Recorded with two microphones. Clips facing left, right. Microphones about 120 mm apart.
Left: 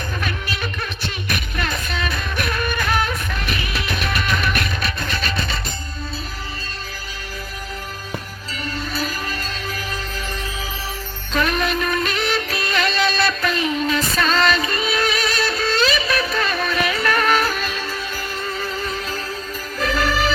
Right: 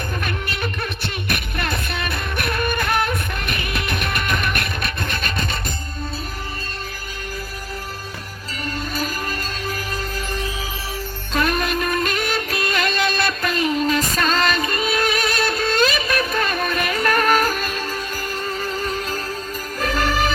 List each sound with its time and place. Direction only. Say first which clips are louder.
0.2 s music: even; 55° right (ahead or behind)
8.6 s music: even; 45° right (ahead or behind)
11.3 s music: even; 40° right (ahead or behind)